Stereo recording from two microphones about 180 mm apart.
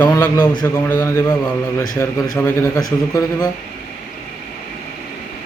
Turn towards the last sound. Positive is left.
turn(degrees=20)  # may be behind; listen again after turning